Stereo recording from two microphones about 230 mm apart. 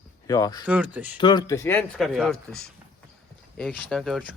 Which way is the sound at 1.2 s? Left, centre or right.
Centre.